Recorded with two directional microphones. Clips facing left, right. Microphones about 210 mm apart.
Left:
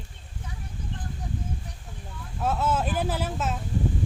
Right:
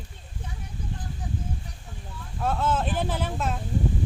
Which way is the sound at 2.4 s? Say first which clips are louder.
Even; 10° left (ahead or behind).